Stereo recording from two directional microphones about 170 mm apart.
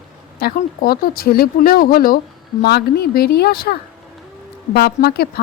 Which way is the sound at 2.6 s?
70° left (ahead or behind).